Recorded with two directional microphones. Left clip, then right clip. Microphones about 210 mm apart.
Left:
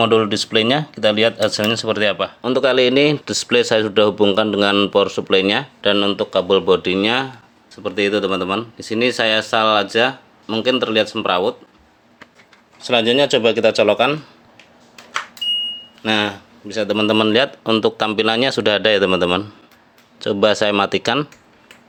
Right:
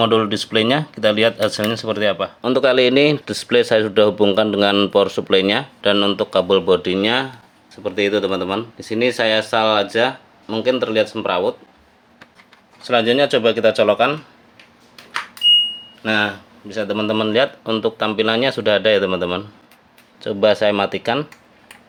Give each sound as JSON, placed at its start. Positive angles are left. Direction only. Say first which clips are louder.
{"t": 0.0, "sound": "speech", "louder": "left 1 dB", "side_deg": 5}
{"t": 12.8, "sound": "speech", "louder": "even", "side_deg": 15}
{"t": 16.0, "sound": "speech", "louder": "even", "side_deg": 15}